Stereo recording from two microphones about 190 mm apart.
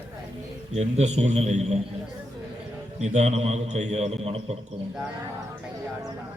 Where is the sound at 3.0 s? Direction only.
35° right (ahead or behind).